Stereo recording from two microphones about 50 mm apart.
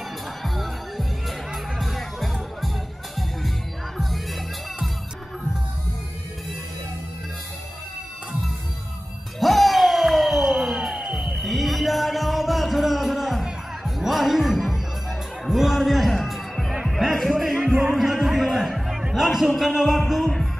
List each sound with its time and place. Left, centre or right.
0.4 s music: centre
4.0 s music: centre
9.4 s music: centre
11.2 s music: centre
17.6 s music: centre
17.9 s music: centre